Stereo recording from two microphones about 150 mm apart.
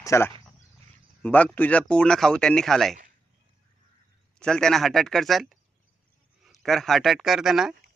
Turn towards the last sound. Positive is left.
turn(degrees=0)  # may be behind; listen again after turning